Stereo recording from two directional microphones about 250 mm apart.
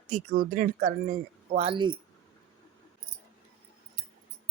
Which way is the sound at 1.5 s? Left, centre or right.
Right.